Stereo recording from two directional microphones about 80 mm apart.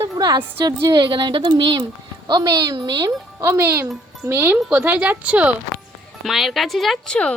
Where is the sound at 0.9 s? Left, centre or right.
Right.